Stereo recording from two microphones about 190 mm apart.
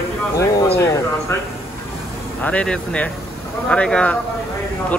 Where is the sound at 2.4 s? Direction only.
5° left (ahead or behind).